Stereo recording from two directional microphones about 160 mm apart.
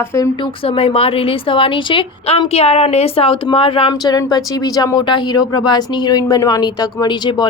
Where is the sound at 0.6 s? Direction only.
35° left (ahead or behind).